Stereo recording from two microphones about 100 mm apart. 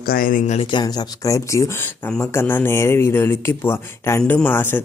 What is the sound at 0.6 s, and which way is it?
Speech, 50° left (ahead or behind).